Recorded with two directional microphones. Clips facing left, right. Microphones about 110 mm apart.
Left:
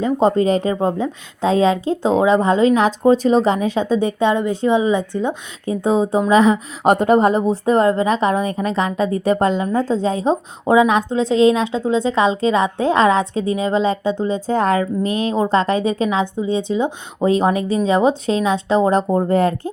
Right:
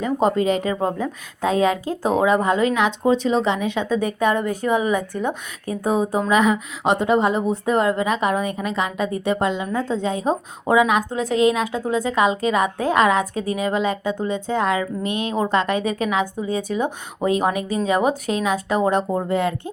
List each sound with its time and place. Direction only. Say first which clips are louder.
0.0 s a woman's voice: left 4 dB; 30° left (ahead or behind)
6.8 s a woman's voice: left 5 dB; 50° left (ahead or behind)